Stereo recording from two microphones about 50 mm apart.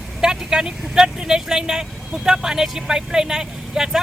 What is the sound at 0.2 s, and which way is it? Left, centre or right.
Speech, centre.